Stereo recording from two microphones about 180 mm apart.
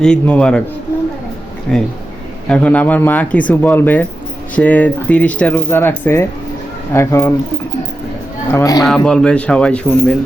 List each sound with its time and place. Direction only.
0.0 s speech: 5° left (ahead or behind)
1.7 s speech: 5° left (ahead or behind)
8.4 s speech: 15° left (ahead or behind)
8.9 s speech: 5° left (ahead or behind)